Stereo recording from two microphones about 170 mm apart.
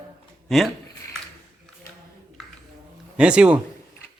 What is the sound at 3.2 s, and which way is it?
Speech, 5° right (ahead or behind).